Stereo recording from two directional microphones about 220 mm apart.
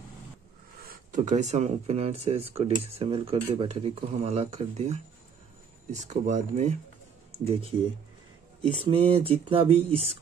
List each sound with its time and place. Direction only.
0.8 s speech: 35° right (ahead or behind)
8.8 s speech: 25° right (ahead or behind)